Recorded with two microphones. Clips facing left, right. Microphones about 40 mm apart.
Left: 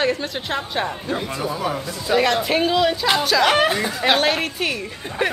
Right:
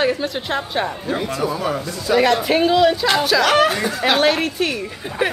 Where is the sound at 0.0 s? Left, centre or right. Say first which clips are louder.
Right 2 dB; centre.